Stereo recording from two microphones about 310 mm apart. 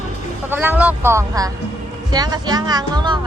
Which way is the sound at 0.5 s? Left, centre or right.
Centre.